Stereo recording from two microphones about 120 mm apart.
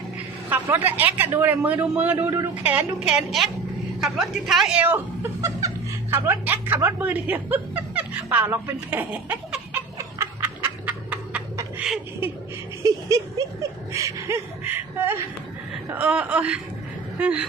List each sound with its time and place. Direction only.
0.5 s speech: 15° right (ahead or behind)
2.1 s a woman's voice: 25° right (ahead or behind); by 4.8 s centre (ahead or behind)
4.8 s speech: 20° right (ahead or behind)
10.2 s a sound: 20° right (ahead or behind)
12.8 s a sound: 25° right (ahead or behind)
15.9 s speech: 10° right (ahead or behind)